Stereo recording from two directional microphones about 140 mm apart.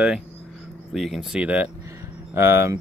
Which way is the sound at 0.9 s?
Centre (ahead or behind).